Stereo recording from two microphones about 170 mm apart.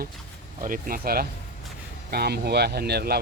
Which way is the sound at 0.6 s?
55° right (ahead or behind).